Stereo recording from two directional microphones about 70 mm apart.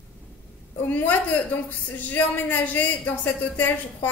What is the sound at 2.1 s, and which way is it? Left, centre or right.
A woman's voice, left.